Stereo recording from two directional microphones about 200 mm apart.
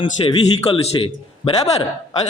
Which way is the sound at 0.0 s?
25° left (ahead or behind).